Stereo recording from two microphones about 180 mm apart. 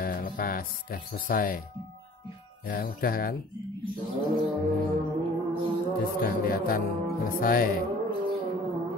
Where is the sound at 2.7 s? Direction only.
55° left (ahead or behind).